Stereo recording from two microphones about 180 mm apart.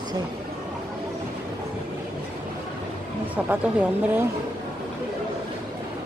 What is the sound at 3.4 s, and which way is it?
Speech, 5° right (ahead or behind).